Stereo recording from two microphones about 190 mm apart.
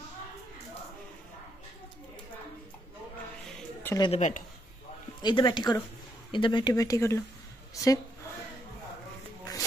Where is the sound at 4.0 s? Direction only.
35° left (ahead or behind).